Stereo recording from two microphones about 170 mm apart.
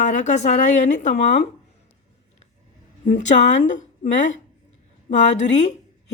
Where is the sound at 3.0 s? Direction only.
45° left (ahead or behind).